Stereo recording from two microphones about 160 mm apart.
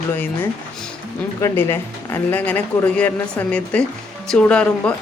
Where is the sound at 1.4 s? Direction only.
15° left (ahead or behind).